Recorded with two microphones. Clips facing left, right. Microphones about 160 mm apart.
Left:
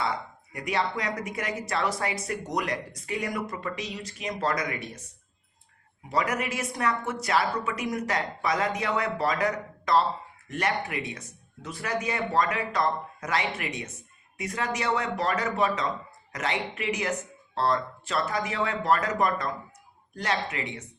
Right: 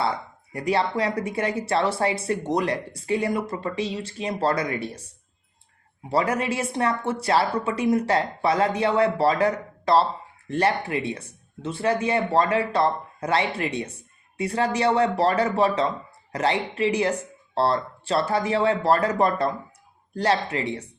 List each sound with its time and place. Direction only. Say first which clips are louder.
0.5 s speech: right 5 dB; 30° right (ahead or behind)
6.1 s speech: right 5 dB; 30° right (ahead or behind)